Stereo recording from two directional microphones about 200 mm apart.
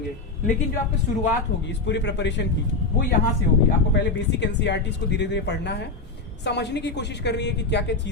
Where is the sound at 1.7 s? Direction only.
60° left (ahead or behind).